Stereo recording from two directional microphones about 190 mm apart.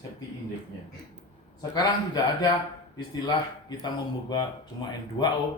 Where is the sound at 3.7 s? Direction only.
25° left (ahead or behind).